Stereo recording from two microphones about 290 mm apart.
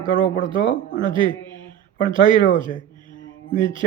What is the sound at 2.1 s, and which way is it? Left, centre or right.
A man's voice, centre.